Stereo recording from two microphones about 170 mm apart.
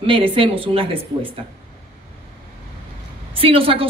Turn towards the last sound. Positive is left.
turn(degrees=-35)  # may be behind; listen again after turning